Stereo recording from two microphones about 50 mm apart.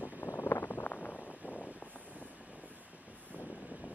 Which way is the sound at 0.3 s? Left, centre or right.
Left.